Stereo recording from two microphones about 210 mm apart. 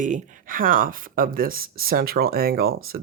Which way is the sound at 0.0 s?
35° right (ahead or behind).